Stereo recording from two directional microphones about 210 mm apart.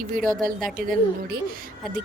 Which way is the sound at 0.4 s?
40° right (ahead or behind).